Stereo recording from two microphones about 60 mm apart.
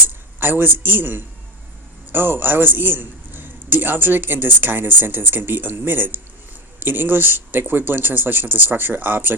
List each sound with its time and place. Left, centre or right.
0.1 s a man's voice: right